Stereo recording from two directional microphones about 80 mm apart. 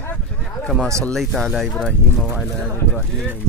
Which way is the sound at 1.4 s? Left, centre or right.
Centre.